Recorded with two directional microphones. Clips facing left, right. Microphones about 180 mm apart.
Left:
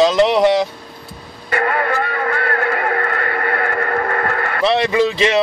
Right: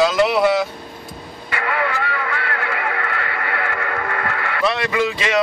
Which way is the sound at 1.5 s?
45° left (ahead or behind).